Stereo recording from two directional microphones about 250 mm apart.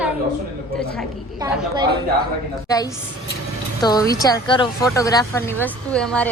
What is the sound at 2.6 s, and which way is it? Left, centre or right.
Speech, centre.